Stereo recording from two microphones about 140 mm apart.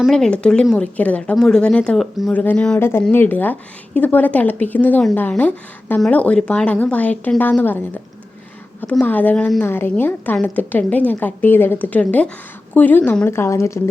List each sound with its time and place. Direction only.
0.0 s a woman's voice: 5° left (ahead or behind)
2.3 s a woman's voice: 10° left (ahead or behind)